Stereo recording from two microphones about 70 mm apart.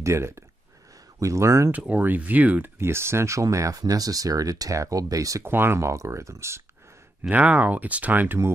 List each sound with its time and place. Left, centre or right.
0.0 s speech: right
1.7 s speech: right
2.8 s speech: right
5.4 s speech: right
7.2 s speech: right